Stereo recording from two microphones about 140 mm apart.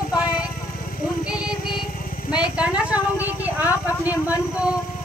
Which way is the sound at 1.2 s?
5° right (ahead or behind).